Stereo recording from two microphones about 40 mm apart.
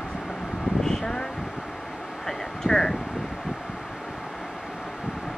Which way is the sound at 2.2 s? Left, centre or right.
Centre.